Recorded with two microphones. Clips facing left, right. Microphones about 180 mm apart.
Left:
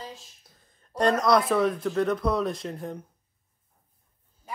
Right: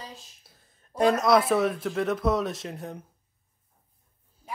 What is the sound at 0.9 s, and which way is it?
Speech, 5° right (ahead or behind).